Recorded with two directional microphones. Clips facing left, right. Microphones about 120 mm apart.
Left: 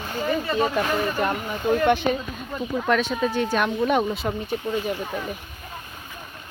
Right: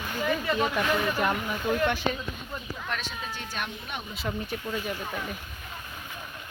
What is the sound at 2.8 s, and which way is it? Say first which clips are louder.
Speech: left 15 dB; 90° left.